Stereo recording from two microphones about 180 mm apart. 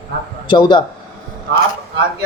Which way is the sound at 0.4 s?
25° left (ahead or behind).